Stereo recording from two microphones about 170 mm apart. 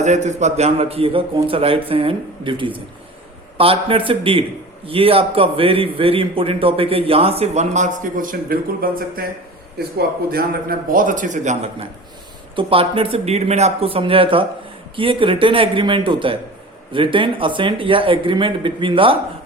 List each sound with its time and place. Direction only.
0.0 s a man's voice: 40° right (ahead or behind); by 9.2 s 60° right (ahead or behind)
10.2 s a man's voice: 60° right (ahead or behind); by 19.2 s 30° right (ahead or behind)